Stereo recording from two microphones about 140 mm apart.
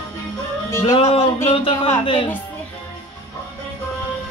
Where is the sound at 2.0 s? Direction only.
35° left (ahead or behind).